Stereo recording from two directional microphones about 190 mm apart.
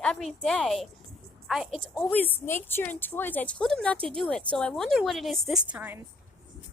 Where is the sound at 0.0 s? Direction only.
5° left (ahead or behind).